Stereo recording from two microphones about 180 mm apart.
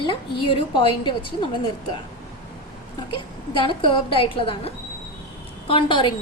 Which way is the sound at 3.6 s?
30° left (ahead or behind).